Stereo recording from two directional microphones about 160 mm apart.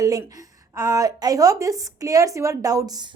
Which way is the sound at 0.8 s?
20° right (ahead or behind).